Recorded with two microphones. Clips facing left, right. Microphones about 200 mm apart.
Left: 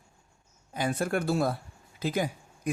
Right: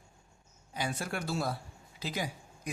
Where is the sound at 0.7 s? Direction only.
50° left (ahead or behind).